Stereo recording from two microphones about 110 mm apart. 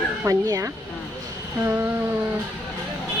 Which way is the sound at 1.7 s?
20° right (ahead or behind).